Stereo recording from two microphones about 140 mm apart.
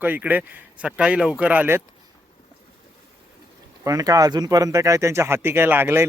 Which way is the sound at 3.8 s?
25° right (ahead or behind).